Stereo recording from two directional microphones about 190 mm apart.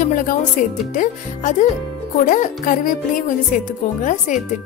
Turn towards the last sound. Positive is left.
turn(degrees=40)  # may be behind; listen again after turning